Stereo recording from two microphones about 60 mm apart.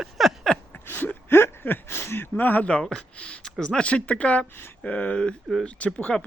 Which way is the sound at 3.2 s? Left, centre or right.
Centre.